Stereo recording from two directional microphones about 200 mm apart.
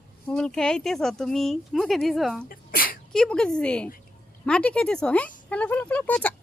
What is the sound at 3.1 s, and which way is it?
Speech, 5° left (ahead or behind).